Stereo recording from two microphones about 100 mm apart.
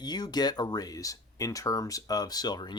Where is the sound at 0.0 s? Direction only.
45° left (ahead or behind).